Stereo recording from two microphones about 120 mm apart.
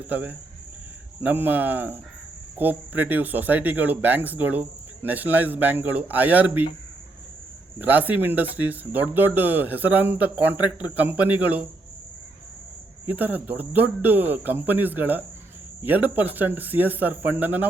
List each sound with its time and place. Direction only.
0.1 s speech: 15° right (ahead or behind)
7.8 s speech: 15° right (ahead or behind)
13.1 s speech: 15° right (ahead or behind)